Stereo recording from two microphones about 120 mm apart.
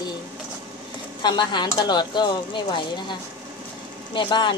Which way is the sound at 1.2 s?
40° left (ahead or behind).